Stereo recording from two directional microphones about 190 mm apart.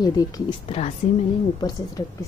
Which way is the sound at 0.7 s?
35° left (ahead or behind).